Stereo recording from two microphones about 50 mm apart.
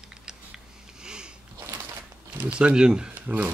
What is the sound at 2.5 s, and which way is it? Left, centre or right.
Speech, centre.